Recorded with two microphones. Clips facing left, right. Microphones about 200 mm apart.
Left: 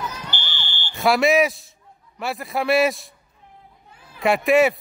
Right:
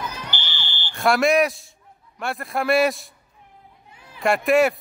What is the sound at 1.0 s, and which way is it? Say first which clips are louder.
Speech: left 1 dB; centre (ahead or behind).